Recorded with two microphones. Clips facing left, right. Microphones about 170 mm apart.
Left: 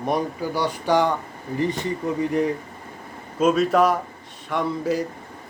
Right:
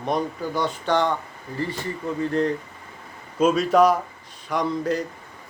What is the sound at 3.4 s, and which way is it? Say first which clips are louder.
Speech: even; centre (ahead or behind).